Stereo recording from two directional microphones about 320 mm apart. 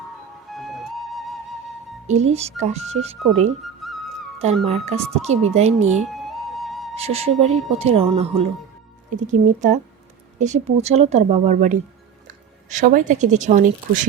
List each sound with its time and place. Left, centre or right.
0.5 s music: centre
2.0 s speech: right
3.8 s music: centre
4.6 s speech: right
6.1 s music: centre
6.9 s speech: centre